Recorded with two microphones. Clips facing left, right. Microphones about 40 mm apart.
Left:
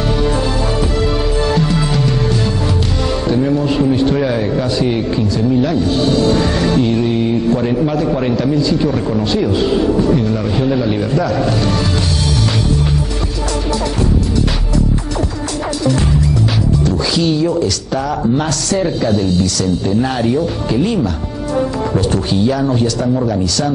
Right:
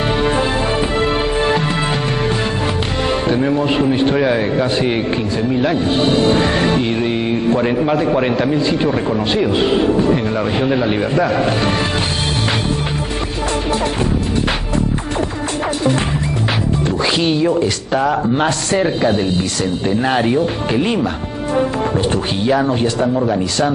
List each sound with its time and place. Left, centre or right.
0.2 s music: right
3.3 s a man's voice: right
16.8 s a man's voice: right